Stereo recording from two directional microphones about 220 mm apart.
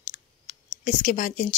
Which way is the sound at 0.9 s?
35° left (ahead or behind).